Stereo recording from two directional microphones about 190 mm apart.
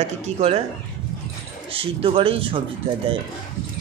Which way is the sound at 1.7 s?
30° right (ahead or behind).